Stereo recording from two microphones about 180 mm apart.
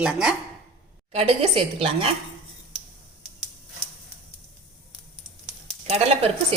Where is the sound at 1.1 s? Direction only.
35° right (ahead or behind).